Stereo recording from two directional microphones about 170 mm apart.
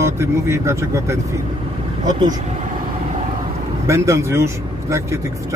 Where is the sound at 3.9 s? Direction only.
15° right (ahead or behind).